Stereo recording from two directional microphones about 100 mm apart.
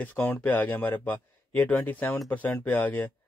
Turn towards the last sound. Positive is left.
turn(degrees=20)  # may be behind; listen again after turning